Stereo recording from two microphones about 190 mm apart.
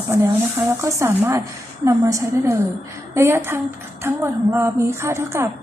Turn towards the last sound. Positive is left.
turn(degrees=-15)  # may be behind; listen again after turning